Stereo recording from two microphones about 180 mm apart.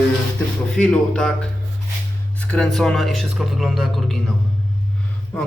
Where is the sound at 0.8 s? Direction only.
5° left (ahead or behind).